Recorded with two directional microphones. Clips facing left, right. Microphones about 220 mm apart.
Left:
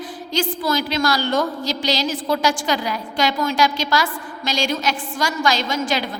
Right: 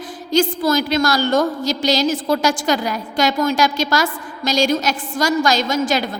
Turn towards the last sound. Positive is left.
turn(degrees=-45)  # may be behind; listen again after turning